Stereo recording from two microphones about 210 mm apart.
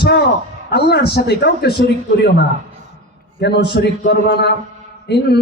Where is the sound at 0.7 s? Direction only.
50° left (ahead or behind).